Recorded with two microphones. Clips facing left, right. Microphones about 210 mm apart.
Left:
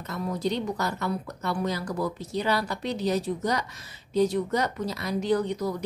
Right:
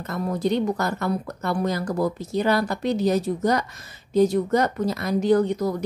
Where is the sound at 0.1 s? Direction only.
50° right (ahead or behind).